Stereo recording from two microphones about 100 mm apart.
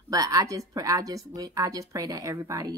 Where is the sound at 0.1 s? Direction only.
35° right (ahead or behind).